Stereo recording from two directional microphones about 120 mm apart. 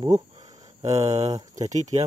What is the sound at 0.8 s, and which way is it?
Speech, 65° right (ahead or behind).